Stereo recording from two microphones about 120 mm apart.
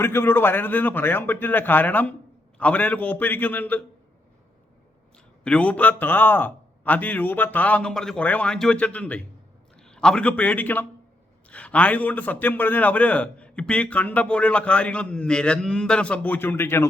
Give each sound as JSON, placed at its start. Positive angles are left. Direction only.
{"t": 0.0, "sound": "a man's voice", "side_deg": 20}
{"t": 5.1, "sound": "a man's voice", "side_deg": 10}